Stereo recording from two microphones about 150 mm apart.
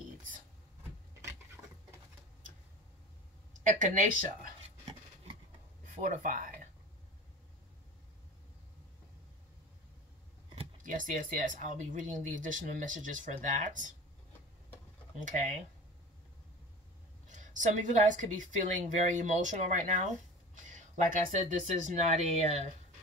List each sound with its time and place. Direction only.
3.6 s speech: 60° right (ahead or behind)
4.8 s rub: 35° right (ahead or behind)
5.9 s speech: 60° right (ahead or behind)
10.8 s speech: 60° right (ahead or behind)
15.1 s speech: 55° right (ahead or behind)
17.3 s speech: 55° right (ahead or behind)